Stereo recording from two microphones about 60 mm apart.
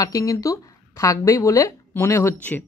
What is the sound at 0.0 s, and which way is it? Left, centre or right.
A woman's voice, left.